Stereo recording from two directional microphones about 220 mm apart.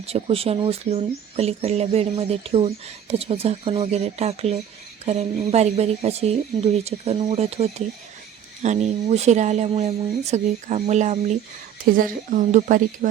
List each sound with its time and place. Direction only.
0.0 s speech: 25° right (ahead or behind)